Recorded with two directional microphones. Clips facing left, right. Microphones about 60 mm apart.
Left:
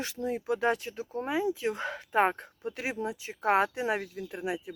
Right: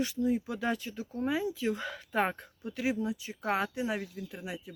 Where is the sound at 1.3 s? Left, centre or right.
Centre.